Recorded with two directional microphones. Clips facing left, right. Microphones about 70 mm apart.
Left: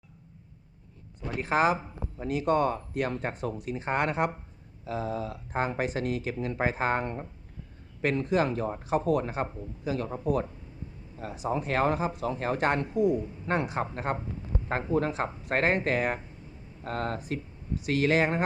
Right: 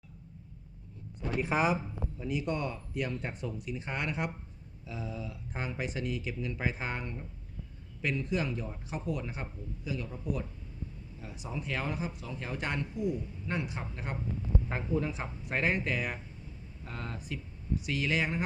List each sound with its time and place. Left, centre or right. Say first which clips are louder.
1.4 s speech: left 4 dB; left
4.9 s speech: left 8 dB; left
13.1 s a man's voice: left 7 dB; left
13.5 s speech: left 8 dB; left